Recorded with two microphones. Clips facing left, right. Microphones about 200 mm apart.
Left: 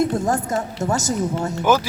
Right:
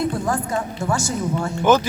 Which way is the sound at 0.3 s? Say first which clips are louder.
Left 1 dB; 45° left (ahead or behind).